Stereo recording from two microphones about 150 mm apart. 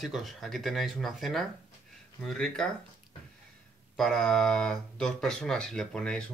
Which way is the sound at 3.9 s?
Centre (ahead or behind).